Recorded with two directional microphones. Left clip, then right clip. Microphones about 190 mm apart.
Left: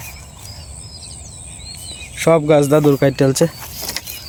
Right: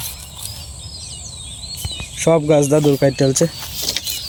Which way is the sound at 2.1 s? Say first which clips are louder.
Left 2 dB; 5° left (ahead or behind).